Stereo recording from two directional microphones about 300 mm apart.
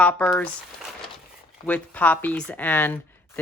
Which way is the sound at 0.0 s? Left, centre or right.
Centre.